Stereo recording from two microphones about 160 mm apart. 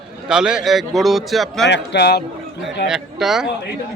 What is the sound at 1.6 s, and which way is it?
Speech, 90° left.